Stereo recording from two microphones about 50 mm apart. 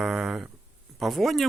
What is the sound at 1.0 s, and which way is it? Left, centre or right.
Speech, centre.